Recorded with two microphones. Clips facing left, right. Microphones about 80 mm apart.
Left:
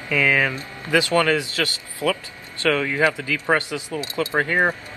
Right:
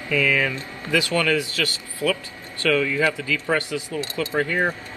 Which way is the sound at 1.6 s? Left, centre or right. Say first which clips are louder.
Even; left.